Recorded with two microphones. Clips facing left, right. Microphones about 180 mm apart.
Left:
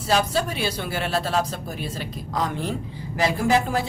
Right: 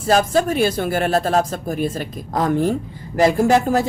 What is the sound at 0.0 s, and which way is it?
Speech, 50° right (ahead or behind).